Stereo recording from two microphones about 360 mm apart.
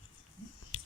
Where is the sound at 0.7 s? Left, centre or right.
Left.